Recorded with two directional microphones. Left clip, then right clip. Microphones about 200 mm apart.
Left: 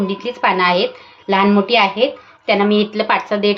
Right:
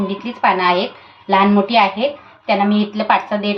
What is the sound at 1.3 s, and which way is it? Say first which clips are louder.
A woman's voice: even; 60° left (ahead or behind).